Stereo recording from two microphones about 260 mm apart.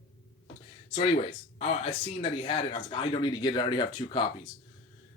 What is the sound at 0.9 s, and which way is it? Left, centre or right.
Speech, left.